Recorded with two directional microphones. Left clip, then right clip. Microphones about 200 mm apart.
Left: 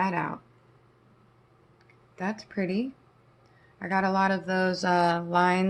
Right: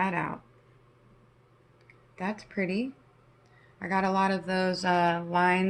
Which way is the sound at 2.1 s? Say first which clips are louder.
Left 1 dB; 10° left (ahead or behind).